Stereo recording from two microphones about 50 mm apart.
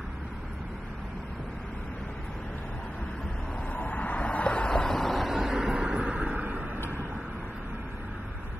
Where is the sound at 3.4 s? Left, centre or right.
Left.